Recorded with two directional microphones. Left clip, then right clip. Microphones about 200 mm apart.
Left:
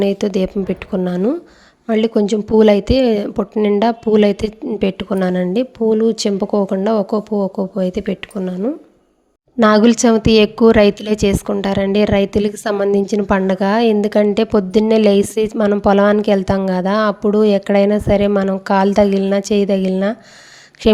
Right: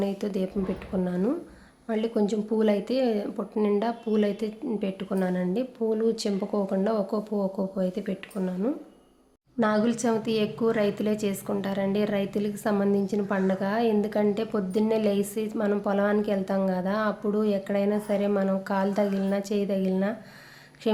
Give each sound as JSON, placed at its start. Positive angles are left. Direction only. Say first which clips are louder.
{"t": 0.0, "sound": "a woman's voice", "louder": "left 13 dB", "side_deg": 40}